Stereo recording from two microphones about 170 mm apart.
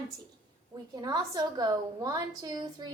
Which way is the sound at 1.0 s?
25° right (ahead or behind).